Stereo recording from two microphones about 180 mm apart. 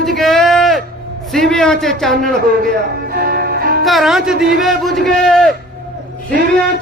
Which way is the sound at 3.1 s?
55° right (ahead or behind).